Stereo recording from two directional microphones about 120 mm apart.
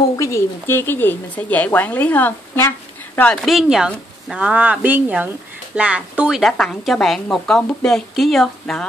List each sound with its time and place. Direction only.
0.1 s speech: 25° left (ahead or behind)
3.3 s a woman's voice: centre (ahead or behind)